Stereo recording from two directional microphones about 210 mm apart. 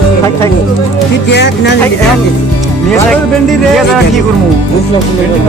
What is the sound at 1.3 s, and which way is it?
Speech, 55° left (ahead or behind).